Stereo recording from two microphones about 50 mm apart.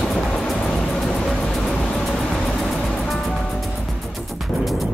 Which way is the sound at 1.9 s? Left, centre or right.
Centre.